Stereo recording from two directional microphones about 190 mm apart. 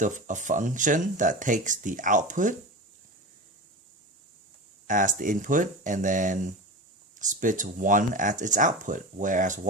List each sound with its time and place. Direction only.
0.0 s speech: 40° right (ahead or behind)
4.9 s speech: 45° right (ahead or behind)